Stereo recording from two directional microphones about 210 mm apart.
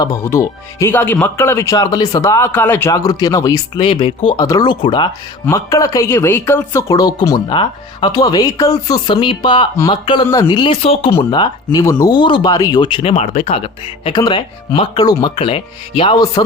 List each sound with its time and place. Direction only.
0.0 s speech: 15° left (ahead or behind)